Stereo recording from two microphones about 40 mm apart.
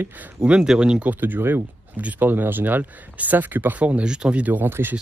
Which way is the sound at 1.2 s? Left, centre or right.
Right.